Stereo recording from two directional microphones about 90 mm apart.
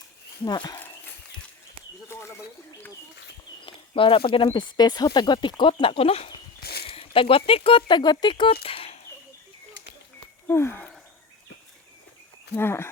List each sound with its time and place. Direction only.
0.4 s speech: 50° left (ahead or behind)
3.7 s speech: 80° left
10.4 s a sound: 30° left (ahead or behind)
12.5 s speech: 25° left (ahead or behind)